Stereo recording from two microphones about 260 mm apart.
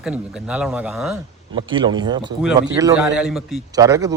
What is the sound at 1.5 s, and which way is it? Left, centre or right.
Speech, centre.